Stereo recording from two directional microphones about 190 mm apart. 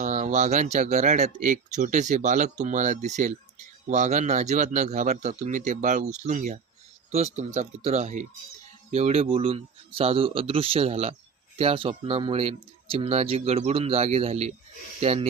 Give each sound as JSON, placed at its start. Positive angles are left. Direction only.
{"t": 0.0, "sound": "speech", "side_deg": -40}